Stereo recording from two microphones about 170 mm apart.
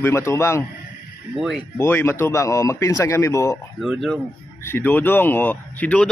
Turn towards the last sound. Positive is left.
turn(degrees=10)  # may be behind; listen again after turning